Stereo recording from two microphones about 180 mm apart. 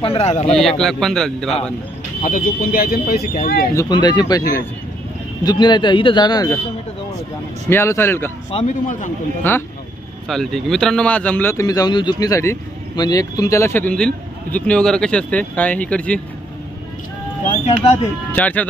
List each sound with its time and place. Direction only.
0.0 s a man's voice: 35° left (ahead or behind)
0.6 s a man's voice: centre (ahead or behind)
2.2 s speech: 50° left (ahead or behind)
3.7 s speech: 25° left (ahead or behind)
7.7 s a man's voice: 15° left (ahead or behind)
8.6 s a man's voice: 45° left (ahead or behind)
9.5 s a man's voice: 10° left (ahead or behind)
18.3 s a man's voice: 10° left (ahead or behind)